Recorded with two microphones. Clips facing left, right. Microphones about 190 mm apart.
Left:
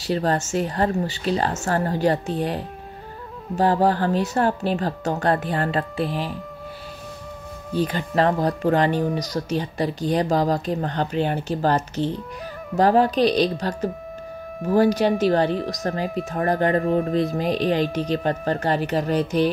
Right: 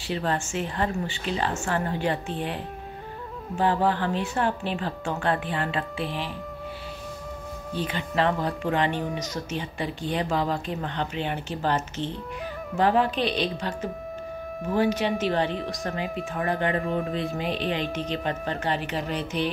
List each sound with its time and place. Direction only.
0.0 s speech: 40° left (ahead or behind)
7.7 s speech: 40° left (ahead or behind)